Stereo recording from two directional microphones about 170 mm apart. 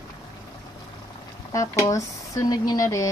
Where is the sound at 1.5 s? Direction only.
20° left (ahead or behind).